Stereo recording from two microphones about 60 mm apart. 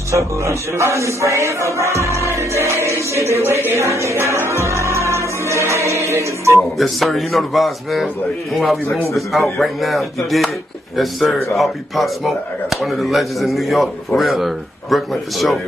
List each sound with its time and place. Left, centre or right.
0.1 s speech: right
6.8 s speech: centre
9.1 s speech: centre